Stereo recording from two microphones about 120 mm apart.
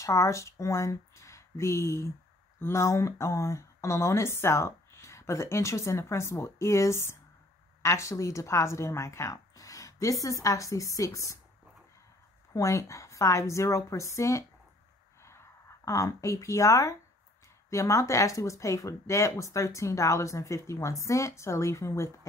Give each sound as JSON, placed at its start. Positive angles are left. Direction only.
{"t": 0.0, "sound": "speech", "side_deg": 25}
{"t": 12.5, "sound": "speech", "side_deg": 25}